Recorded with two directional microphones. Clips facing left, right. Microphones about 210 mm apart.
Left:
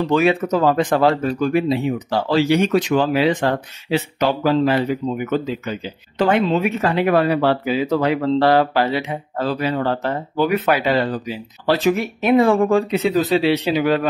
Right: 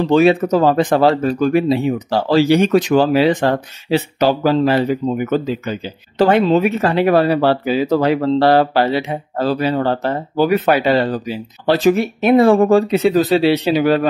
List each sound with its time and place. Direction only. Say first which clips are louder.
0.0 s speech: right 5 dB; 30° right (ahead or behind)